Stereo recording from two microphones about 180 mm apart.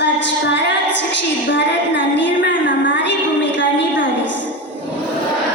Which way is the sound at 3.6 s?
90° left.